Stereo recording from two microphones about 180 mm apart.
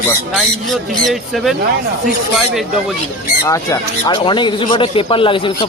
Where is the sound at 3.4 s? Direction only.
20° left (ahead or behind).